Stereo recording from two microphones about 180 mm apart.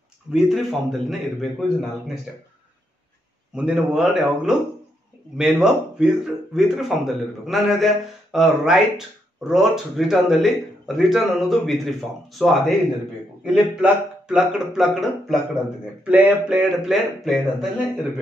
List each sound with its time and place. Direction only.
0.3 s speech: centre (ahead or behind)
3.5 s speech: 5° right (ahead or behind)